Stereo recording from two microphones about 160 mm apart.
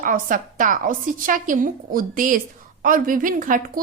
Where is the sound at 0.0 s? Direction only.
60° right (ahead or behind).